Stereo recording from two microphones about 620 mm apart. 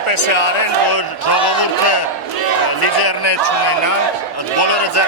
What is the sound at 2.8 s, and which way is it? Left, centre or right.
A man's voice, left.